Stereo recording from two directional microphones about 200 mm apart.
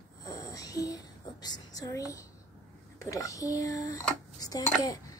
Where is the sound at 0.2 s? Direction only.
15° left (ahead or behind).